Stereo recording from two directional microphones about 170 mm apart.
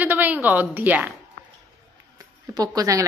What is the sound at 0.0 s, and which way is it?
A woman's voice, 10° right (ahead or behind).